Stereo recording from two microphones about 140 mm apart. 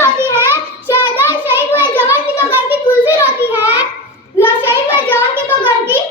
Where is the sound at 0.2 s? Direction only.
15° right (ahead or behind).